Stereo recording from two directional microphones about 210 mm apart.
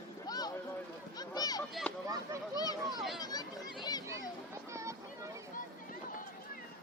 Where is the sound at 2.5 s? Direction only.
20° left (ahead or behind).